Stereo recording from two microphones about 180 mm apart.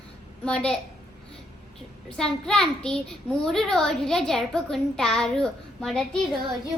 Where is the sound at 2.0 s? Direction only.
5° left (ahead or behind).